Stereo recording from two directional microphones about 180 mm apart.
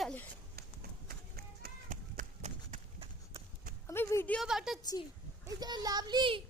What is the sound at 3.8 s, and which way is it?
Speech, 15° left (ahead or behind).